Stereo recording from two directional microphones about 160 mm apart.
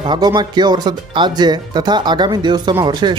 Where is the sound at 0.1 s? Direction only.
25° right (ahead or behind).